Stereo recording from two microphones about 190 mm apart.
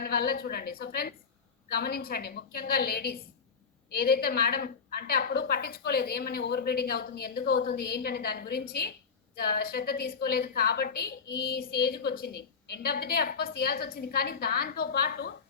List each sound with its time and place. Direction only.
0.0 s a woman's voice: 50° left (ahead or behind)